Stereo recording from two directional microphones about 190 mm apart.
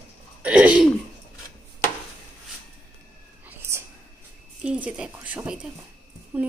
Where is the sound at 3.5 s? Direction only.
15° right (ahead or behind).